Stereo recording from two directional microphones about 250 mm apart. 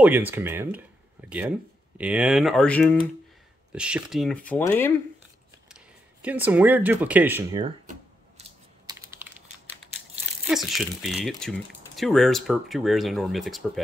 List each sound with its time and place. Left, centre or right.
0.0 s speech: centre
2.0 s speech: centre
6.2 s speech: centre
7.6 s a sound: right
8.8 s typing: centre
10.4 s speech: centre